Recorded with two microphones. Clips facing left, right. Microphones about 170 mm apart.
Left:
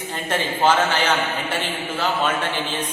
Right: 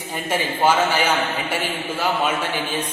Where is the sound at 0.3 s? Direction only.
10° right (ahead or behind).